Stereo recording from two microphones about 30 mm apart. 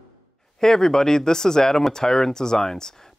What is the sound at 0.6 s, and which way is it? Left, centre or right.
Speech, centre.